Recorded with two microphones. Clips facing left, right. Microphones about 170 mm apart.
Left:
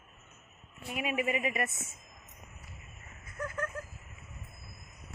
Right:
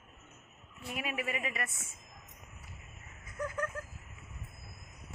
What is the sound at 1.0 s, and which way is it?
Speech, 15° left (ahead or behind).